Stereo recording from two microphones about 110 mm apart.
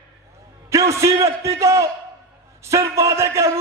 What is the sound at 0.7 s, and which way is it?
A man's voice, 30° right (ahead or behind).